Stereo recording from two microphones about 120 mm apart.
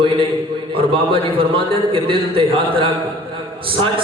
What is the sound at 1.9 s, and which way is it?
A man's voice, 45° right (ahead or behind).